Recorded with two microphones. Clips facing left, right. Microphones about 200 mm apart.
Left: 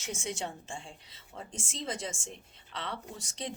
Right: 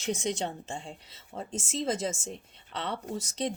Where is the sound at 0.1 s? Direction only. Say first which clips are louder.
Right 6 dB; 35° right (ahead or behind).